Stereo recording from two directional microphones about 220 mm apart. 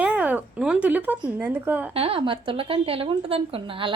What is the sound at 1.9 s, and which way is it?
A woman's voice, 25° right (ahead or behind).